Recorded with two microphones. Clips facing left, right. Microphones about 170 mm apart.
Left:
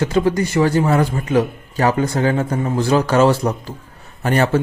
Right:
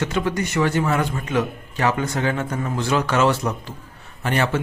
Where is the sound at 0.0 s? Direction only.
35° left (ahead or behind).